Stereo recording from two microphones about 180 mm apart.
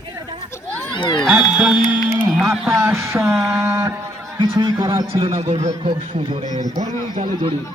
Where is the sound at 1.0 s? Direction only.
25° left (ahead or behind).